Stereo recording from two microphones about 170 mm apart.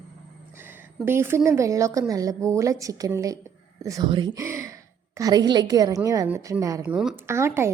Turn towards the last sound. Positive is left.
turn(degrees=-15)  # may be behind; listen again after turning